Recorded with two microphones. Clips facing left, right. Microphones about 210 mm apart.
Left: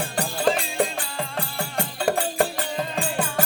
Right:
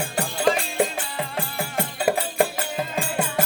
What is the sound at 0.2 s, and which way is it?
Music, centre (ahead or behind).